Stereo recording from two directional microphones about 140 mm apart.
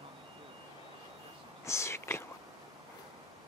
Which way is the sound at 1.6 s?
20° left (ahead or behind).